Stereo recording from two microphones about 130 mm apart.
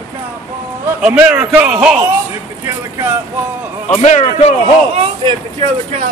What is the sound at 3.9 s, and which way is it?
Speech, 60° left (ahead or behind).